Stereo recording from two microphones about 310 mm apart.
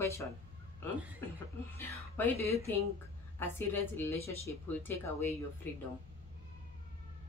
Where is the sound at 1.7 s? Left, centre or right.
Centre.